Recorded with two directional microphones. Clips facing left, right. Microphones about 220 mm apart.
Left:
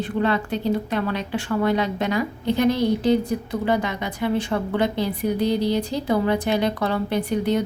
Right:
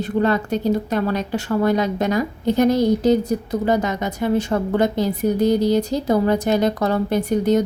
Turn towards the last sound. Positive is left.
turn(degrees=-40)  # may be behind; listen again after turning